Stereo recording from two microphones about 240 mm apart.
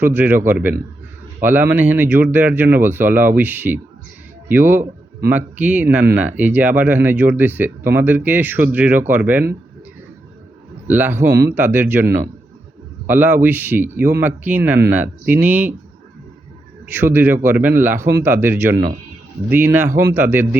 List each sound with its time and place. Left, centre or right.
0.0 s speech: centre
10.8 s speech: centre
11.3 s speech: right
11.5 s speech: centre
16.8 s speech: centre